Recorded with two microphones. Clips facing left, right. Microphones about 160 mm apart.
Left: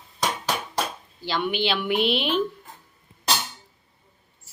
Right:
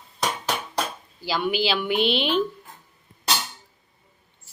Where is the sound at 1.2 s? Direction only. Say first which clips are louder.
Right 1 dB; 5° right (ahead or behind).